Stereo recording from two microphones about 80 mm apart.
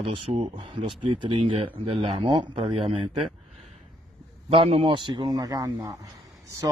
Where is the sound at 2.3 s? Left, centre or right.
Right.